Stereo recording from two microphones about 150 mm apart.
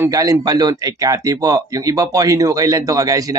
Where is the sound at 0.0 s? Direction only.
25° right (ahead or behind).